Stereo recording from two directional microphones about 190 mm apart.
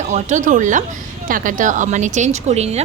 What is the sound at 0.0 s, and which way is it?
A woman's voice, 40° right (ahead or behind).